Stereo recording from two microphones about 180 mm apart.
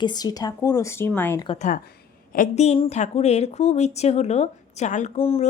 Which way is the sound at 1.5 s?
45° left (ahead or behind).